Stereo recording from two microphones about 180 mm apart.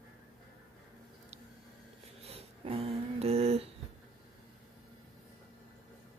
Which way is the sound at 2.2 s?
35° right (ahead or behind).